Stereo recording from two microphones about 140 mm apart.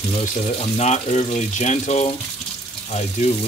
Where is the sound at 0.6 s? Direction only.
50° left (ahead or behind).